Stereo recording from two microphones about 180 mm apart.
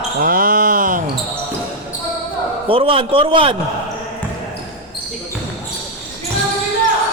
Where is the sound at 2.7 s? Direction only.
30° right (ahead or behind).